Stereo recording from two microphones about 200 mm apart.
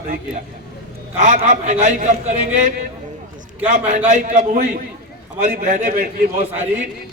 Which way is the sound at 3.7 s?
35° right (ahead or behind).